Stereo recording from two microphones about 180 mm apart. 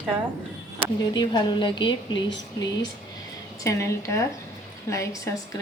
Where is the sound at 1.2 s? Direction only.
25° left (ahead or behind).